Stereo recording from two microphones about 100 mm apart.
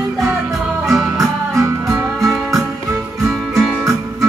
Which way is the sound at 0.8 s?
Centre (ahead or behind).